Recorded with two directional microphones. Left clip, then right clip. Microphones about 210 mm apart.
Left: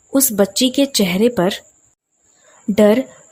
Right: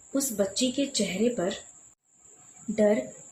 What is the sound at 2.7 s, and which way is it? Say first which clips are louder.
Speech: left 11 dB; 55° left (ahead or behind).